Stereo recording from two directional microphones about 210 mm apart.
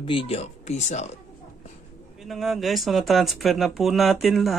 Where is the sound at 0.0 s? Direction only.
25° left (ahead or behind).